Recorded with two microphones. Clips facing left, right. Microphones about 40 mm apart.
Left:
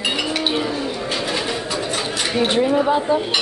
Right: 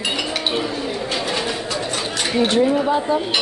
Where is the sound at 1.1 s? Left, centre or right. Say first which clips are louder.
Even; centre.